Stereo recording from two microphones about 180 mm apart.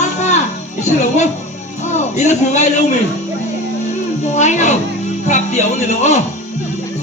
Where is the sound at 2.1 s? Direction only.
40° left (ahead or behind).